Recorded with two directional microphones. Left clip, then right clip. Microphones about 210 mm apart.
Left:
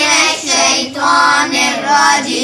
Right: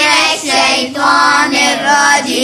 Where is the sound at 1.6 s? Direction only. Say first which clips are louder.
Right 1 dB; 40° right (ahead or behind).